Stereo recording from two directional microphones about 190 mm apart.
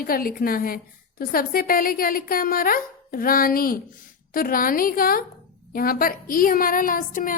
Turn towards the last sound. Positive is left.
turn(degrees=45)  # may be behind; listen again after turning